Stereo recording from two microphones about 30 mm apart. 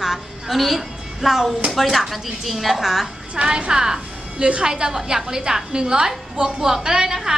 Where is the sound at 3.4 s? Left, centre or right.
Right.